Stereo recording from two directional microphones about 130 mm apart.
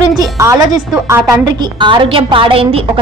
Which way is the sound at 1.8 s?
40° right (ahead or behind).